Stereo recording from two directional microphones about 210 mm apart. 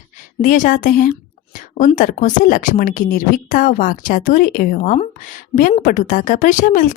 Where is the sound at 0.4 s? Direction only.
40° left (ahead or behind).